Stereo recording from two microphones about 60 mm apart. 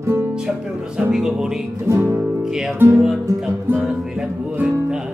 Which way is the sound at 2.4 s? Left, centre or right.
Centre.